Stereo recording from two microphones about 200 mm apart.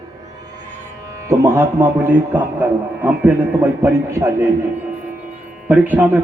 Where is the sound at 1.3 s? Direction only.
10° right (ahead or behind).